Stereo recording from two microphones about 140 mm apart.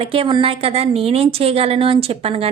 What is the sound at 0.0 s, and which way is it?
A woman's voice, 40° right (ahead or behind).